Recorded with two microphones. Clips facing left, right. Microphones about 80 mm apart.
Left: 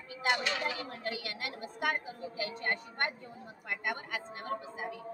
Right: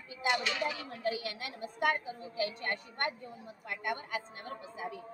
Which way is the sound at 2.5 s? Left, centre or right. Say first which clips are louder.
Left 2 dB; left.